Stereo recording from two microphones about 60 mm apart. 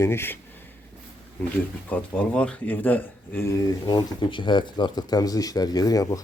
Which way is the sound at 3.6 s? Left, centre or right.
Left.